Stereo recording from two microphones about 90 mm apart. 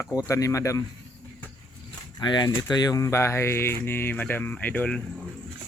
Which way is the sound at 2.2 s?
55° left (ahead or behind).